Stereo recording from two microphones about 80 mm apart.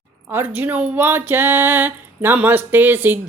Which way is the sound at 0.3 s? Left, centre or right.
Right.